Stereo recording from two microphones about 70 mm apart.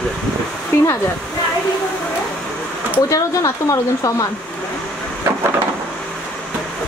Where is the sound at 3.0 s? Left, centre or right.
Left.